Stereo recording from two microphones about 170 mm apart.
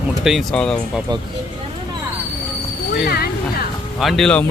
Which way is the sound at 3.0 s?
65° left (ahead or behind).